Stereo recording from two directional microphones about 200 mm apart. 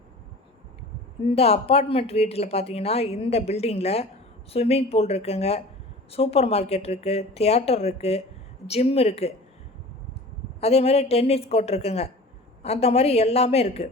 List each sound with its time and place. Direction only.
1.4 s speech: 30° left (ahead or behind)
10.6 s speech: 30° left (ahead or behind)